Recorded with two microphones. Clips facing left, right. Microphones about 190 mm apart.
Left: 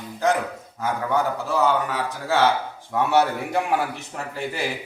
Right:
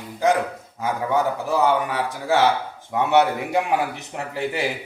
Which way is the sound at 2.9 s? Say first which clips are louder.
Right 2 dB; 15° right (ahead or behind).